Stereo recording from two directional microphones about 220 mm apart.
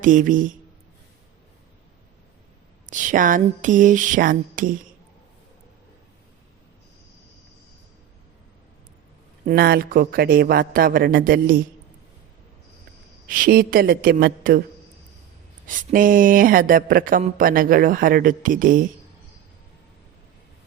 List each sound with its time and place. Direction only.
0.0 s speech: 35° right (ahead or behind)
2.9 s speech: 35° right (ahead or behind)
9.5 s speech: 45° right (ahead or behind)
13.2 s speech: 40° right (ahead or behind)
15.6 s speech: 40° right (ahead or behind)